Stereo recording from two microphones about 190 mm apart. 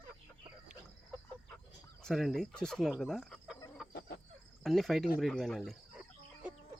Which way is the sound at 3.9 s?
60° left (ahead or behind).